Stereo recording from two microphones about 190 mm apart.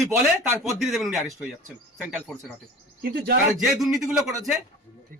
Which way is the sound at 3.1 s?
50° right (ahead or behind).